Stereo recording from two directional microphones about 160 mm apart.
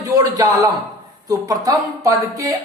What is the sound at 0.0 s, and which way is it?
A man's voice, 20° right (ahead or behind).